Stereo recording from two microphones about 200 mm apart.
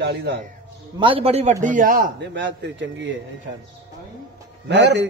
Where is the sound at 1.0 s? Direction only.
30° right (ahead or behind).